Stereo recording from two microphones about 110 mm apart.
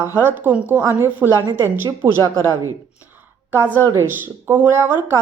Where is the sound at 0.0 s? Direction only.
20° right (ahead or behind).